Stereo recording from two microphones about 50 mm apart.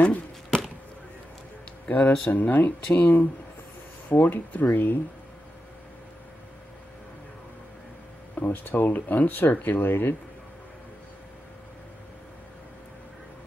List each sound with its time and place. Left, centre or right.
1.9 s speech: left
8.4 s speech: left